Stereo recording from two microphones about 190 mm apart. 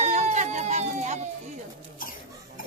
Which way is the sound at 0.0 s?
35° right (ahead or behind).